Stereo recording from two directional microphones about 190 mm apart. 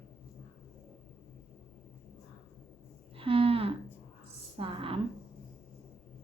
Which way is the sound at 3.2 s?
30° right (ahead or behind).